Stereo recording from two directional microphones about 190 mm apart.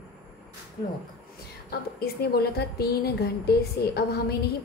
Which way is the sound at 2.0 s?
55° left (ahead or behind).